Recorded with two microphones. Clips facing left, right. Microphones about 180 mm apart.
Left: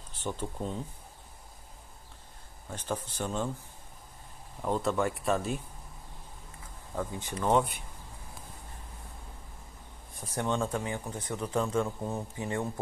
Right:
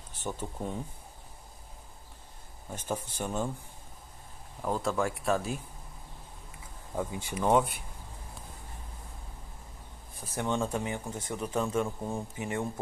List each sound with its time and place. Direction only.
0.2 s speech: 10° right (ahead or behind)
2.7 s speech: 10° right (ahead or behind)
4.6 s speech: centre (ahead or behind)
7.0 s speech: 10° right (ahead or behind)
10.4 s speech: 15° right (ahead or behind)